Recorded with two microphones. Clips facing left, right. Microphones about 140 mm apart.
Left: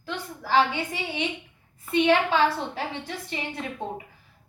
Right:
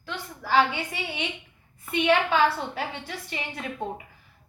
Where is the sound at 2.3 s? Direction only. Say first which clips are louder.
Even; 35° left (ahead or behind).